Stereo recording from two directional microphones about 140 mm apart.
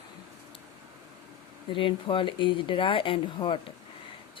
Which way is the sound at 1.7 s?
40° left (ahead or behind).